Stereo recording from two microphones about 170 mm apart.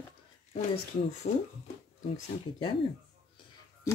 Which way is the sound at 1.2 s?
45° left (ahead or behind).